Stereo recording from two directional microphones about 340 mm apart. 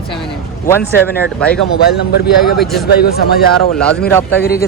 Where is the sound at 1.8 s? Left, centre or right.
Left.